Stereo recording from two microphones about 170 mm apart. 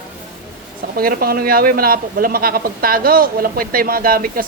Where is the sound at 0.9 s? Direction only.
60° right (ahead or behind).